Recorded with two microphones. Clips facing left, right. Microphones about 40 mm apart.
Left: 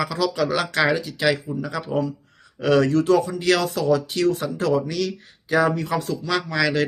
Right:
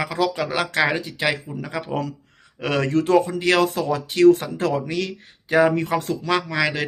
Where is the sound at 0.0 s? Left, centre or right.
Right.